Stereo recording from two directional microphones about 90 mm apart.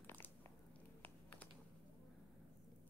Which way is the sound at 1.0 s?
20° left (ahead or behind).